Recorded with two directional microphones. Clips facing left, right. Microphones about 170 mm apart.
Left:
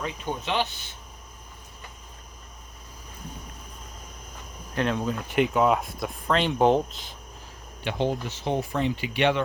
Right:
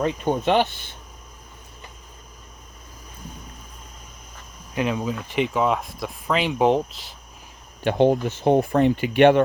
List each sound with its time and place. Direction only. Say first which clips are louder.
0.0 s speech: right 10 dB; 55° right (ahead or behind)
4.7 s speech: right 2 dB; 5° right (ahead or behind)
7.9 s speech: right 9 dB; 55° right (ahead or behind)